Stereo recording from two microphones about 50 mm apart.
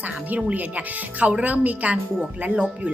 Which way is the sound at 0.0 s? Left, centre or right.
Right.